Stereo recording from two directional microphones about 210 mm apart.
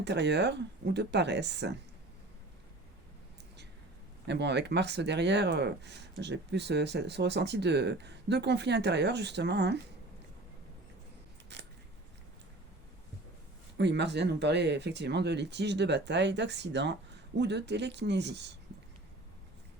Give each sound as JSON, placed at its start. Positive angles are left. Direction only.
{"t": 0.0, "sound": "speech", "side_deg": -55}
{"t": 4.3, "sound": "speech", "side_deg": -55}
{"t": 13.7, "sound": "speech", "side_deg": -55}